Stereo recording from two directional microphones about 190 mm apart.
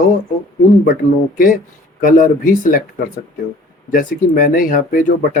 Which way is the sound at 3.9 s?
45° left (ahead or behind).